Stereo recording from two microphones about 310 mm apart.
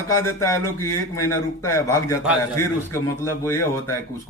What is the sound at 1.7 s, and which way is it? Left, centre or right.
Speech, centre.